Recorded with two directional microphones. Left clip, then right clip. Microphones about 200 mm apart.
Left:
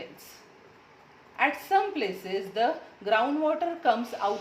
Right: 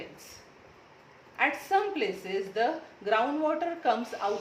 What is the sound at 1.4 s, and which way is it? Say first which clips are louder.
Speech: left 2 dB; 15° left (ahead or behind).